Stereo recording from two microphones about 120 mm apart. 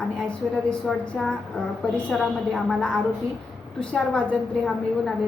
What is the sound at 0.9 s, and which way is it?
Speech, centre (ahead or behind).